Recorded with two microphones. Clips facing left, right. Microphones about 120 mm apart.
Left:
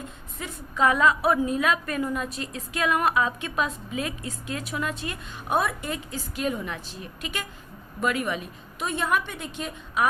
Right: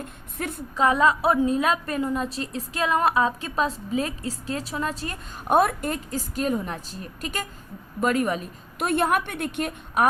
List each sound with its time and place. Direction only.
0.4 s a woman's voice: 55° right (ahead or behind)
0.8 s a woman's voice: 30° right (ahead or behind)
8.8 s a woman's voice: 60° right (ahead or behind)